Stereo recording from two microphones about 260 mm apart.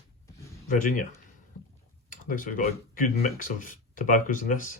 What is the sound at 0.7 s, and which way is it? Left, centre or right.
Speech, left.